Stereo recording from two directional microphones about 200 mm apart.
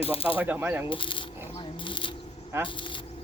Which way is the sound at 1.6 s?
25° left (ahead or behind).